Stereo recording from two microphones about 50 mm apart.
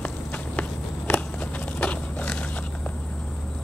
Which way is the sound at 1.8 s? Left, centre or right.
Left.